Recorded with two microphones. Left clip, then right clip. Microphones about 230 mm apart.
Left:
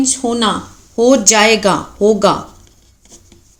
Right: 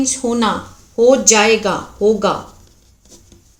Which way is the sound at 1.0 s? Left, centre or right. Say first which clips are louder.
Left 1 dB; left.